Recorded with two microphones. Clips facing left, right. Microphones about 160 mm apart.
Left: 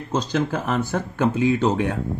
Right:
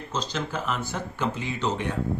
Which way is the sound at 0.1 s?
55° left (ahead or behind).